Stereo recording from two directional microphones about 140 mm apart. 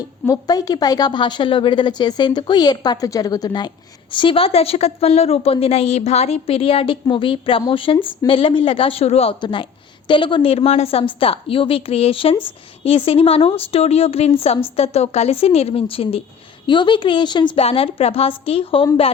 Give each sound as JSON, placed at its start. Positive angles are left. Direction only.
{"t": 0.3, "sound": "a woman's voice", "side_deg": 25}
{"t": 9.4, "sound": "a woman's voice", "side_deg": 35}